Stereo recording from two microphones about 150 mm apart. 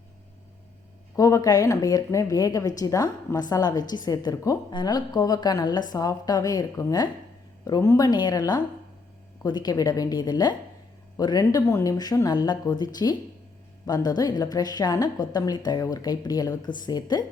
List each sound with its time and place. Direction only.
1.1 s a woman's voice: 20° left (ahead or behind)